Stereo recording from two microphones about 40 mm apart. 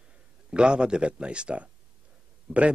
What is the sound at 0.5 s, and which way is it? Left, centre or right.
Speech, right.